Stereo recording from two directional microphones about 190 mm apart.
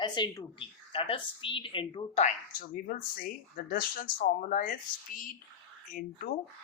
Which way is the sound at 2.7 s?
50° left (ahead or behind).